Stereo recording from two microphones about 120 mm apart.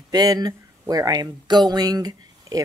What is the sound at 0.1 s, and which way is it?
Speech, 35° right (ahead or behind).